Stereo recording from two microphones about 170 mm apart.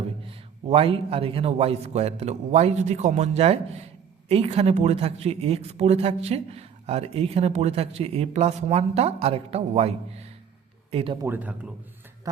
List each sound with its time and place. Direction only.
0.3 s speech: 35° right (ahead or behind)
11.2 s speech: 10° right (ahead or behind)